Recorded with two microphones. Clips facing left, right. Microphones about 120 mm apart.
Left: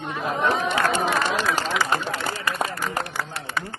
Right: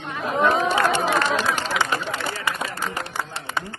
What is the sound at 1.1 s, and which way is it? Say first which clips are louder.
Run: right 2 dB; centre (ahead or behind).